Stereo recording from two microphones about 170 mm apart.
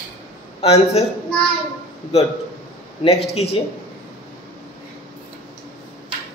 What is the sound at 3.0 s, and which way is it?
Speech, 35° left (ahead or behind).